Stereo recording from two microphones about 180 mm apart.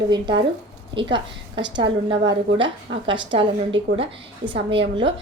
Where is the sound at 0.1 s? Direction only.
25° right (ahead or behind).